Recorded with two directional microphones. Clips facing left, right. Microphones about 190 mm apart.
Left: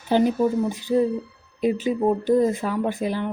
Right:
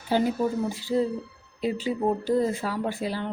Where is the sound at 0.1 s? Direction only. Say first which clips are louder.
Left 5 dB; 20° left (ahead or behind).